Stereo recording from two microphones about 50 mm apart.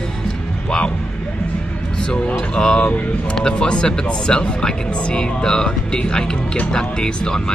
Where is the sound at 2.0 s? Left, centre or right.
Left.